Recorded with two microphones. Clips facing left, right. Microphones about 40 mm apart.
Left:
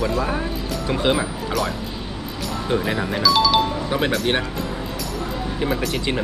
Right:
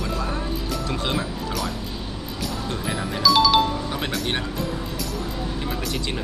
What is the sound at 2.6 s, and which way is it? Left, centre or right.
Speech, left.